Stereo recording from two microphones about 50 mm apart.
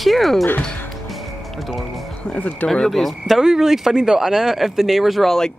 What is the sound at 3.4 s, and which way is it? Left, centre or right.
Speech, centre.